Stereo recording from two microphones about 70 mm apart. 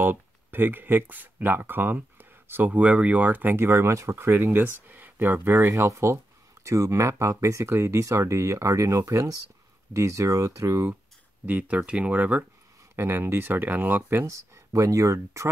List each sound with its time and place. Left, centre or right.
0.0 s speech: right
2.7 s speech: centre
3.5 s speech: right
11.4 s speech: right
12.9 s speech: right
14.2 s speech: right